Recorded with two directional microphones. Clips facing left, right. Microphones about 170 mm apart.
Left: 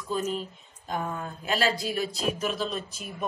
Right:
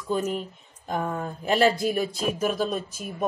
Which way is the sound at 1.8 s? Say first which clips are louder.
Right 5 dB; 50° right (ahead or behind).